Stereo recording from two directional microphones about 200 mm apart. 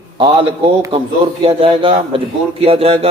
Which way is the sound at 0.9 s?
25° right (ahead or behind).